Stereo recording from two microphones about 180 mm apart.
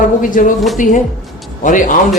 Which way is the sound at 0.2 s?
50° left (ahead or behind).